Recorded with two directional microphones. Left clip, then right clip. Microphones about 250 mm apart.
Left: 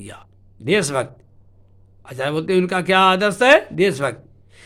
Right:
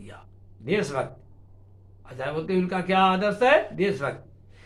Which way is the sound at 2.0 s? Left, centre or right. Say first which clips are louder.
Left 8 dB; left.